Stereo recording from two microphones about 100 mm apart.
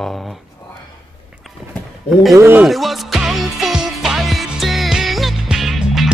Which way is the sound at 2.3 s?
20° right (ahead or behind).